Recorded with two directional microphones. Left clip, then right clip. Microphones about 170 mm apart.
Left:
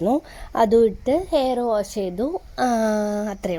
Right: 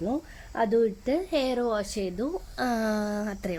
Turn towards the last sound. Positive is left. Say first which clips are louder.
# left 7 dB
turn(degrees=25)  # may be behind; listen again after turning